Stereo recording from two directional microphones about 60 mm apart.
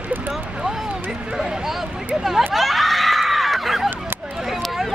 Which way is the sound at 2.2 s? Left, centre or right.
Centre.